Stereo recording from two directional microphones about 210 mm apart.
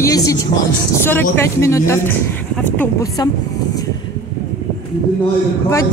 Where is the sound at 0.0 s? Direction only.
15° left (ahead or behind).